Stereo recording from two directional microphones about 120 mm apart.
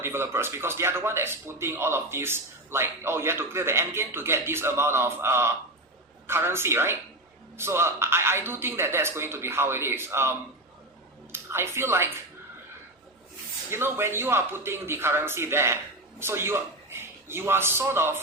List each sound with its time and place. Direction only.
0.0 s speech: 20° right (ahead or behind)
13.7 s speech: 20° right (ahead or behind)